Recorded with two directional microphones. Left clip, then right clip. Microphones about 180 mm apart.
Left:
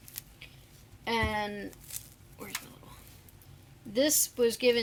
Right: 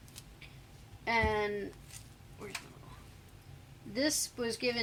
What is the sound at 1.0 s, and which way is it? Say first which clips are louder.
Speech: even; 35° left (ahead or behind).